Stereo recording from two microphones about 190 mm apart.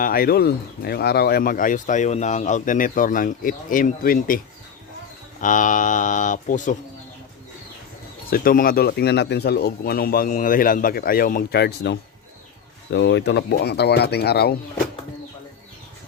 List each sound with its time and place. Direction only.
0.0 s speech: 50° left (ahead or behind)
5.4 s speech: 40° left (ahead or behind)
8.3 s speech: 50° left (ahead or behind)